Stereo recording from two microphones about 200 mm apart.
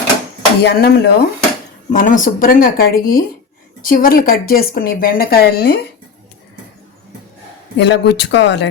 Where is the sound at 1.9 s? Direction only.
40° left (ahead or behind).